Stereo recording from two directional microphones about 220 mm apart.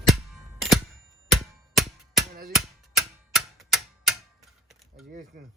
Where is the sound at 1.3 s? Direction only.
Centre (ahead or behind).